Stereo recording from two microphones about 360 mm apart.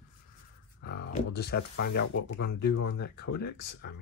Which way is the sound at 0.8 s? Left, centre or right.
Left.